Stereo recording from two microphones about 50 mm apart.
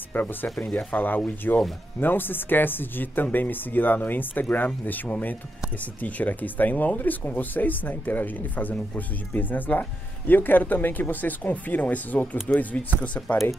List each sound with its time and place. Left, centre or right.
0.1 s speech: left